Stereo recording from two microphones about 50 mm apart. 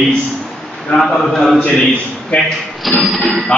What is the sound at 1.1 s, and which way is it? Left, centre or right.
Speech, centre.